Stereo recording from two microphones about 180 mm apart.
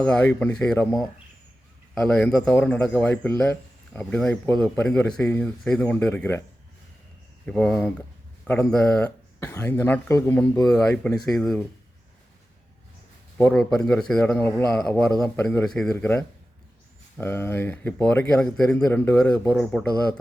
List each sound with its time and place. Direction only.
0.0 s speech: 5° left (ahead or behind)
2.0 s speech: 5° left (ahead or behind)
7.4 s speech: 5° left (ahead or behind)
10.9 s speech: 5° left (ahead or behind)
13.4 s speech: 5° left (ahead or behind)
18.5 s speech: centre (ahead or behind)